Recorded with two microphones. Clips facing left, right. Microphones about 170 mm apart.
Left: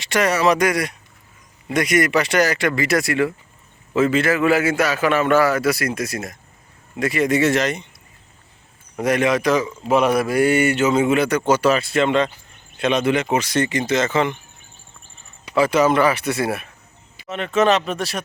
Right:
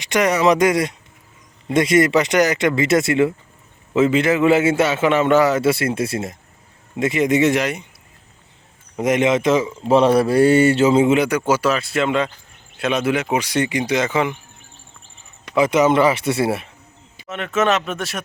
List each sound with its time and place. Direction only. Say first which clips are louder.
0.0 s a man's voice: right 2 dB; 15° right (ahead or behind)
9.0 s a man's voice: right 2 dB; 20° right (ahead or behind)
11.2 s speech: even; 10° right (ahead or behind)
15.5 s a man's voice: right 1 dB; 20° right (ahead or behind)
17.2 s speech: left 2 dB; centre (ahead or behind)